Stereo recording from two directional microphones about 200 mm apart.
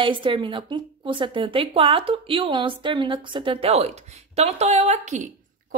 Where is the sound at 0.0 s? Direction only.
25° right (ahead or behind).